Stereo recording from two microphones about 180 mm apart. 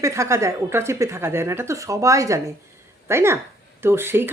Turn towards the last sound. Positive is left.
turn(degrees=-10)  # may be behind; listen again after turning